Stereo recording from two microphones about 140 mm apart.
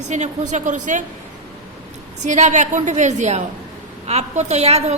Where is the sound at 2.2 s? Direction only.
60° right (ahead or behind).